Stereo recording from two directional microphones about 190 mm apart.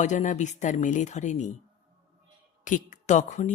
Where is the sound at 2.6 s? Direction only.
40° left (ahead or behind).